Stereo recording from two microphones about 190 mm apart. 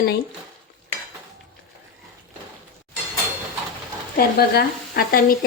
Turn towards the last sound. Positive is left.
turn(degrees=50)  # may be behind; listen again after turning